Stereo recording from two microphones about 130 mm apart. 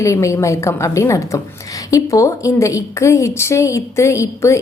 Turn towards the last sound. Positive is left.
turn(degrees=25)  # may be behind; listen again after turning